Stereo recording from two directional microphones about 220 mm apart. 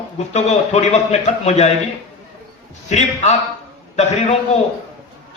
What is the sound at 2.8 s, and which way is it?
Speech, 30° left (ahead or behind).